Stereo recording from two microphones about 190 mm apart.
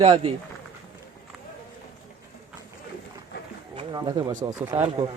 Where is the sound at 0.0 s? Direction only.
30° right (ahead or behind).